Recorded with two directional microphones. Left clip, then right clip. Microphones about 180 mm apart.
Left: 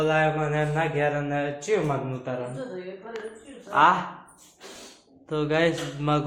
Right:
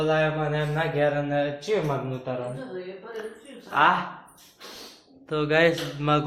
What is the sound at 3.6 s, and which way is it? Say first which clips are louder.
Speech: left 1 dB; 10° left (ahead or behind).